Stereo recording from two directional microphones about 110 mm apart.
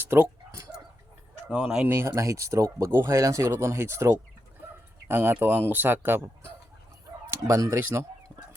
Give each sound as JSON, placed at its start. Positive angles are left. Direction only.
{"t": 0.0, "sound": "dog", "side_deg": -20}
{"t": 1.5, "sound": "speech", "side_deg": -10}
{"t": 2.0, "sound": "speech", "side_deg": -25}
{"t": 4.6, "sound": "a sound", "side_deg": -20}
{"t": 5.0, "sound": "speech", "side_deg": -20}